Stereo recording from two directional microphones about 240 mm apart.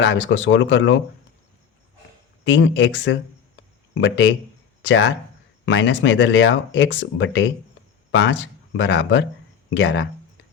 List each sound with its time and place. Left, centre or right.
0.0 s speech: left
2.4 s speech: left